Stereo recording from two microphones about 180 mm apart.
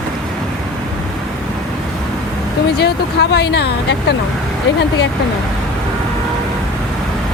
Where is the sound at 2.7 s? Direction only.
65° left (ahead or behind).